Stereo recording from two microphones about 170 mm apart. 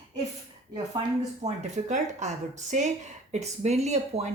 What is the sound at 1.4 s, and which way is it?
Speech, 45° right (ahead or behind).